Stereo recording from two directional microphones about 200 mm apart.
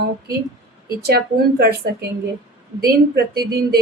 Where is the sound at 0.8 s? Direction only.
50° right (ahead or behind).